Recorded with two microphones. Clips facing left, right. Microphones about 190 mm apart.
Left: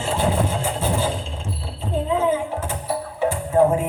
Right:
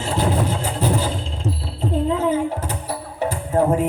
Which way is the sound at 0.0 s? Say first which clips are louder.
Even; 40° right (ahead or behind).